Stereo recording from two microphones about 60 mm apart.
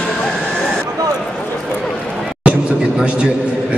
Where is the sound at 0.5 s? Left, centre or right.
Centre.